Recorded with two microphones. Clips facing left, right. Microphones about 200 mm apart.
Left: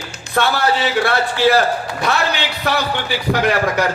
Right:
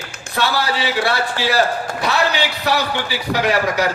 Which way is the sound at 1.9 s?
45° right (ahead or behind).